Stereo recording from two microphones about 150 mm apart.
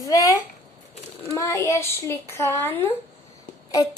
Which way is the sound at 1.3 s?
20° left (ahead or behind).